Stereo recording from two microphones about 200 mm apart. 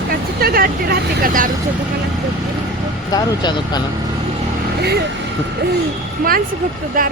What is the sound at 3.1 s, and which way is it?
Speech, 20° left (ahead or behind).